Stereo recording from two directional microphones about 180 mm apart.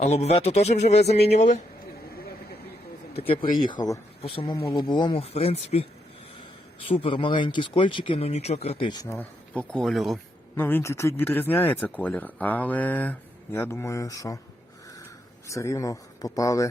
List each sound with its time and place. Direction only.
0.0 s speech: 35° left (ahead or behind)
3.6 s speech: 25° left (ahead or behind)
6.8 s speech: 30° left (ahead or behind)
9.1 s speech: 5° left (ahead or behind)
10.5 s speech: 10° left (ahead or behind)
15.4 s speech: 15° left (ahead or behind)